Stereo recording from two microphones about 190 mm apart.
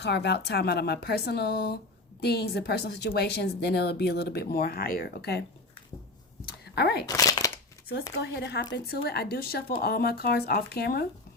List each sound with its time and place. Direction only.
0.0 s a woman's voice: 60° left (ahead or behind)
6.7 s speech: 60° left (ahead or behind)
7.1 s speech: 20° left (ahead or behind)
8.1 s a woman's voice: 60° left (ahead or behind)